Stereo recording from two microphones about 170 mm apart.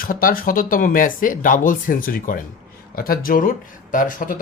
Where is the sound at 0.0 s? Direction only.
55° left (ahead or behind).